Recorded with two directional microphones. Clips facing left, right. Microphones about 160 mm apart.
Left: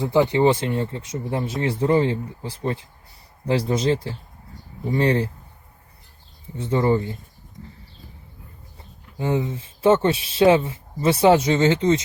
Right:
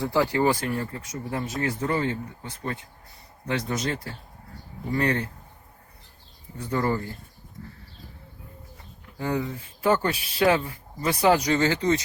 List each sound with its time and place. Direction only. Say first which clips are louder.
0.0 s speech: left 5 dB; 20° left (ahead or behind)
6.6 s speech: left 6 dB; 20° left (ahead or behind)
9.1 s speech: left 4 dB; 20° left (ahead or behind)